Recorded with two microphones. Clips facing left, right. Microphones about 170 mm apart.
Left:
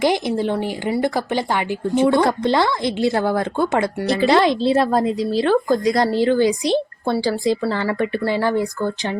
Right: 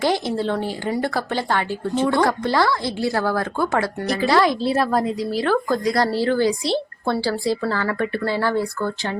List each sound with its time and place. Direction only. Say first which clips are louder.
0.0 s speech: left 2 dB; 15° left (ahead or behind)